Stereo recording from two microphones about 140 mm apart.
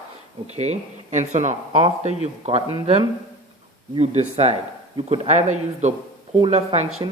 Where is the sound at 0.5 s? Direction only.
50° right (ahead or behind).